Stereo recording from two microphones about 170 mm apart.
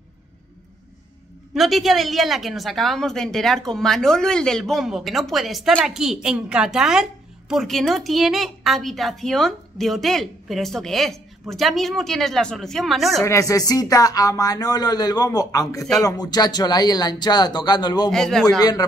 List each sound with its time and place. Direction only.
1.5 s a woman's voice: centre (ahead or behind)
13.2 s speech: 20° left (ahead or behind)
18.1 s a woman's voice: 5° left (ahead or behind)
18.6 s speech: 25° left (ahead or behind)